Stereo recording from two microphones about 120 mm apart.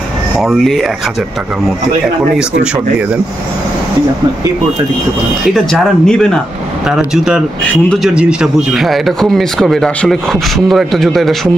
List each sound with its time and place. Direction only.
0.4 s speech: centre (ahead or behind)
5.4 s speech: centre (ahead or behind)
6.9 s speech: 5° right (ahead or behind)